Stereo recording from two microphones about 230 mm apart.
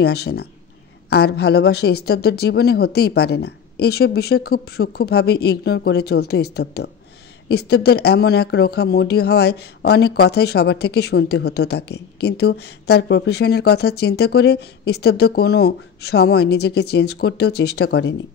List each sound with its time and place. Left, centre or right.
0.0 s speech: left